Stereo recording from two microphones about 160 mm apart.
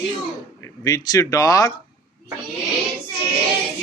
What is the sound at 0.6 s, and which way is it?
Speech, 20° left (ahead or behind).